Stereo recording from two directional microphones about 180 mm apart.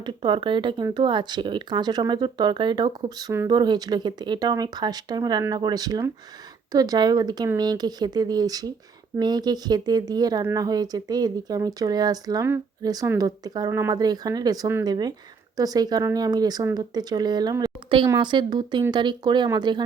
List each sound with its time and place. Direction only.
0.0 s speech: 25° right (ahead or behind)